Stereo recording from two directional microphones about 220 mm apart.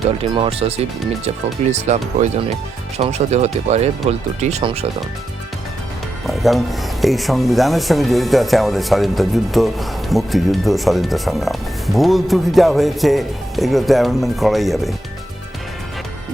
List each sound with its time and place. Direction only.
0.2 s speech: 25° right (ahead or behind)
1.7 s speech: 30° right (ahead or behind)
6.2 s speech: centre (ahead or behind)